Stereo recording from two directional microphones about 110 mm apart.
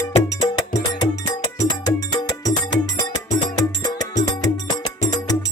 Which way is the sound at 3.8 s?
35° left (ahead or behind).